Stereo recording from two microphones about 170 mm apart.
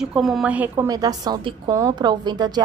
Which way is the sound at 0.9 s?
20° right (ahead or behind).